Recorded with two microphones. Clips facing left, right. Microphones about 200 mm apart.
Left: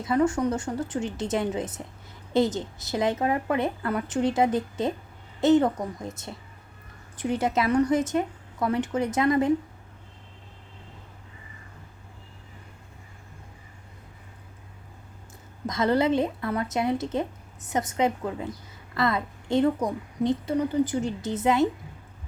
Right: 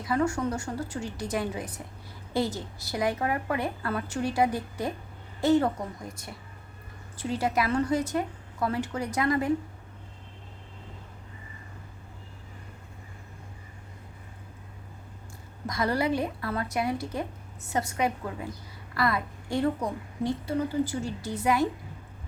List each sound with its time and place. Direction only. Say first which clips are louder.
0.0 s a woman's voice: left 4 dB; 20° left (ahead or behind)
15.6 s a woman's voice: left 4 dB; 20° left (ahead or behind)